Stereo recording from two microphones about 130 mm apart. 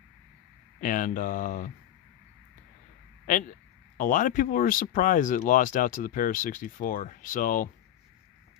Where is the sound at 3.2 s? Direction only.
90° left.